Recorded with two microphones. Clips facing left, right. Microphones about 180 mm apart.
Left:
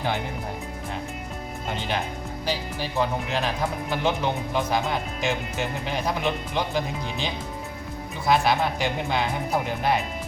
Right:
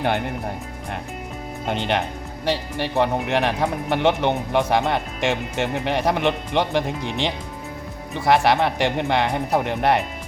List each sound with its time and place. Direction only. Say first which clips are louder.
1.6 s speech: right 6 dB; 65° right (ahead or behind)